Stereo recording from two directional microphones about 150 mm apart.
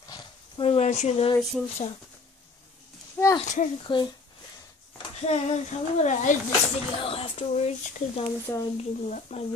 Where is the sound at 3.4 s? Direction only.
55° left (ahead or behind).